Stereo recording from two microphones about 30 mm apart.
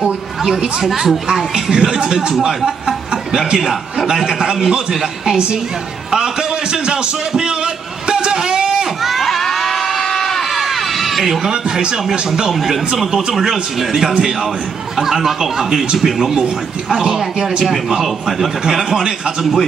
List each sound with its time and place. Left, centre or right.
0.8 s a man's voice: centre
1.5 s a man's voice: right
3.5 s a man's voice: centre
4.3 s a man's voice: centre
8.5 s a sound: right
9.2 s crowd: centre
10.5 s crowd: centre
11.2 s a man's voice: centre
12.5 s a man's voice: centre
13.0 s a man's voice: centre
16.9 s a man's voice: right
17.8 s a man's voice: centre